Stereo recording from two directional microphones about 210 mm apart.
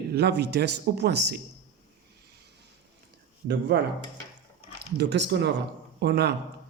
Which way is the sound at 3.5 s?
55° right (ahead or behind).